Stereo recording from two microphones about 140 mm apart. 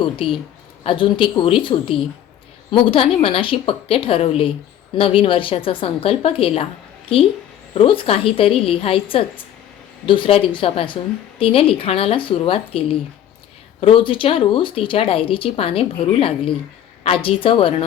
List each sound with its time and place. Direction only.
0.0 s speech: 40° left (ahead or behind)